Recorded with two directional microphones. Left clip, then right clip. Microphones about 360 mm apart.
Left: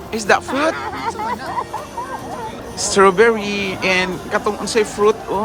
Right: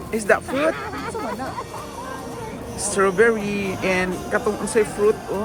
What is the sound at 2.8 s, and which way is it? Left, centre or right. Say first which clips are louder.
Speech: left 6 dB; centre.